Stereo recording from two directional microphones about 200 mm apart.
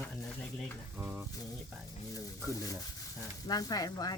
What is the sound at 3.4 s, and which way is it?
Speech, 20° left (ahead or behind).